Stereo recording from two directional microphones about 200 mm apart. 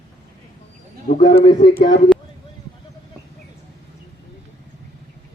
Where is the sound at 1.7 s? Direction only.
55° left (ahead or behind).